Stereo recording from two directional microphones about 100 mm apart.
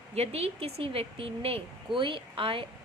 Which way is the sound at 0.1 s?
90° right.